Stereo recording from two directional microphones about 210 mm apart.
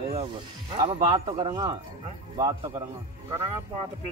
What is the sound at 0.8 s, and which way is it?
A man's voice, 20° right (ahead or behind).